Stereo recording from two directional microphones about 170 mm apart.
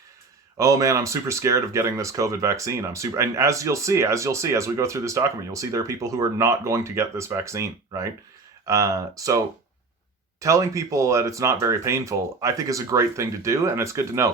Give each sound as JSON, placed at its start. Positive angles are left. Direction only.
{"t": 0.5, "sound": "speech", "side_deg": -20}
{"t": 10.4, "sound": "speech", "side_deg": -20}